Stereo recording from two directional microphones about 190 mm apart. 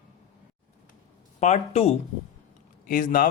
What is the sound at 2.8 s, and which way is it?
Speech, 45° left (ahead or behind).